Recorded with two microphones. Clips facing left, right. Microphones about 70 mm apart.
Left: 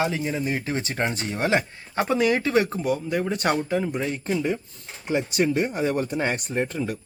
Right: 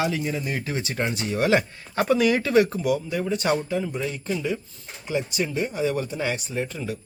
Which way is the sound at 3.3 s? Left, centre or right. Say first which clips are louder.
Right 2 dB; left.